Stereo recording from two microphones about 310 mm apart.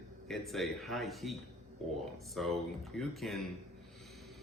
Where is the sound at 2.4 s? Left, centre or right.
Centre.